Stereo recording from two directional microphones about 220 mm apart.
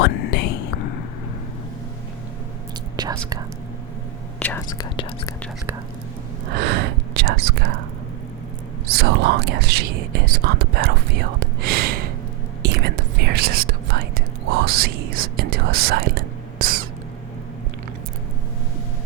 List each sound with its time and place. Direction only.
0.0 s whispering: 45° left (ahead or behind)
2.9 s whispering: 20° right (ahead or behind)
4.4 s whispering: 5° left (ahead or behind)
4.8 s speech: 20° left (ahead or behind)
6.6 s whispering: 50° right (ahead or behind)
8.9 s speech: 50° right (ahead or behind)
11.3 s a sound: 45° right (ahead or behind)
12.6 s whispering: 50° right (ahead or behind)
14.5 s speech: 45° right (ahead or behind)